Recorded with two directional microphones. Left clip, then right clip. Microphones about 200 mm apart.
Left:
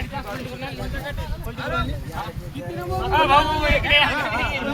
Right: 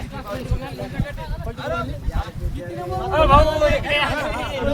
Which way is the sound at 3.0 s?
60° right (ahead or behind).